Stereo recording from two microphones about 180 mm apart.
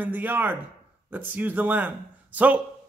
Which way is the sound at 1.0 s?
10° right (ahead or behind).